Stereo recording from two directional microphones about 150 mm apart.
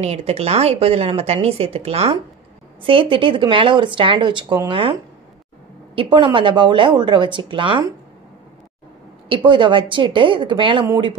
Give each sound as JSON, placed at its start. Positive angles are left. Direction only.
{"t": 0.0, "sound": "a woman's voice", "side_deg": -45}
{"t": 5.9, "sound": "speech", "side_deg": -35}
{"t": 9.3, "sound": "speech", "side_deg": -35}